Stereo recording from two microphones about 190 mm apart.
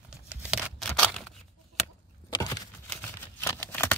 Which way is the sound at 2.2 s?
20° left (ahead or behind).